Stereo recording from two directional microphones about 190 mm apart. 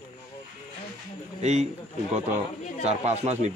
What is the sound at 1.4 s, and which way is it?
Speech, 35° right (ahead or behind).